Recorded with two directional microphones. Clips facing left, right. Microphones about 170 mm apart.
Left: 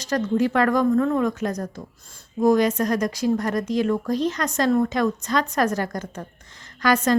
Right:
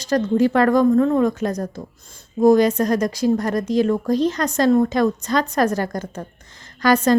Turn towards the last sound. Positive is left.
turn(degrees=-35)  # may be behind; listen again after turning